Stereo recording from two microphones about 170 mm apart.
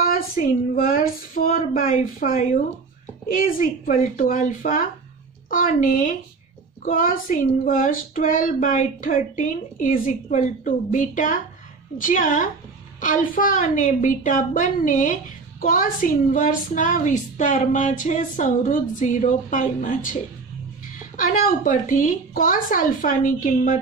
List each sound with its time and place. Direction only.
0.0 s a sound: 55° left (ahead or behind)
3.4 s a woman's voice: 55° left (ahead or behind)
21.2 s a woman's voice: 50° left (ahead or behind)